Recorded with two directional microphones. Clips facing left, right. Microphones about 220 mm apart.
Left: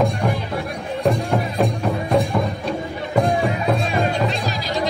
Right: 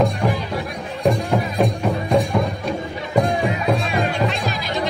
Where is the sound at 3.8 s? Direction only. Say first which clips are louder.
Even; 40° left (ahead or behind).